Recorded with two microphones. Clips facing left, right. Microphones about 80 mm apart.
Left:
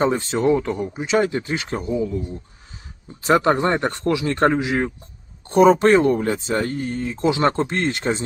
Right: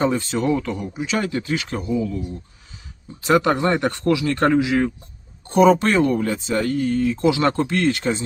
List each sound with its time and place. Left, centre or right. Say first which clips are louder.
0.0 s speech: left 2 dB; left